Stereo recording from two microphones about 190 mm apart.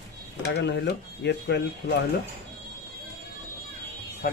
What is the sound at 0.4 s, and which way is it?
Speech, 65° left (ahead or behind).